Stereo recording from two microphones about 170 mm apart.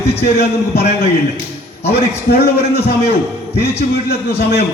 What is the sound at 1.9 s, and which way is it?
Speech, 70° left (ahead or behind).